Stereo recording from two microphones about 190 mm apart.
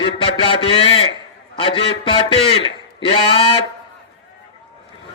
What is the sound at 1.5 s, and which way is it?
Speech, 25° left (ahead or behind).